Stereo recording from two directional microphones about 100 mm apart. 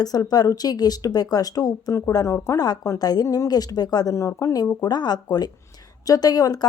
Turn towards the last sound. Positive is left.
turn(degrees=40)  # may be behind; listen again after turning